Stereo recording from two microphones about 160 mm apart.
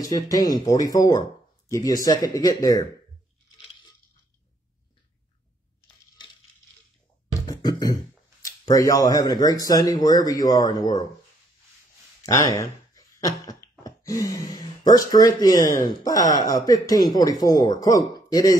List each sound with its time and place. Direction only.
0.0 s speech: 20° left (ahead or behind)
7.4 s beatboxing: 25° left (ahead or behind)
8.6 s speech: 20° left (ahead or behind)
12.2 s speech: 20° left (ahead or behind)